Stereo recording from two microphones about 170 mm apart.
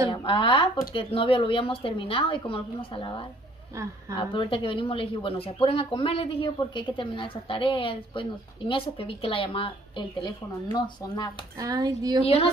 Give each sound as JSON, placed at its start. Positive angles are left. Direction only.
{"t": 0.1, "sound": "a woman's voice", "side_deg": 30}
{"t": 11.5, "sound": "speech", "side_deg": -20}